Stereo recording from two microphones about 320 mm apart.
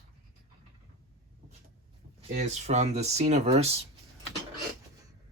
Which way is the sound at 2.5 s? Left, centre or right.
Right.